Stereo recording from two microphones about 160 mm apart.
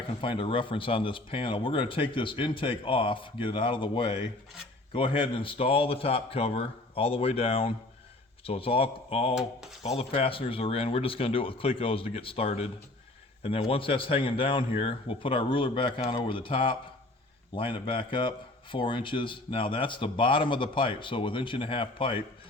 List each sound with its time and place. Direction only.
0.2 s speech: 35° left (ahead or behind)